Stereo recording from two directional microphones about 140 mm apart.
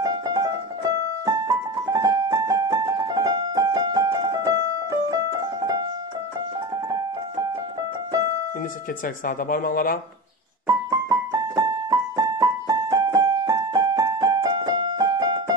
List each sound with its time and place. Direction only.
0.0 s music: 25° right (ahead or behind)
6.9 s keyboard: 25° right (ahead or behind)
9.0 s speech: 85° left
10.7 s keyboard: 25° right (ahead or behind)